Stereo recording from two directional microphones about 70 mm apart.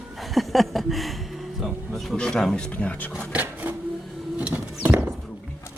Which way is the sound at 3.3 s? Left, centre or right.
Right.